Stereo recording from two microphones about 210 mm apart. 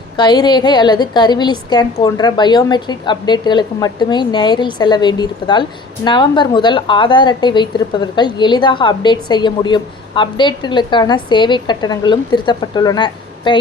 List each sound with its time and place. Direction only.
0.2 s a woman's voice: 20° left (ahead or behind)